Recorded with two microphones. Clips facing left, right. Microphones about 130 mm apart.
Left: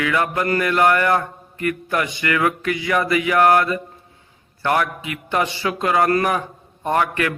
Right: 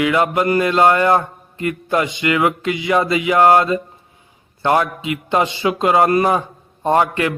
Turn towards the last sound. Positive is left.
turn(degrees=-25)  # may be behind; listen again after turning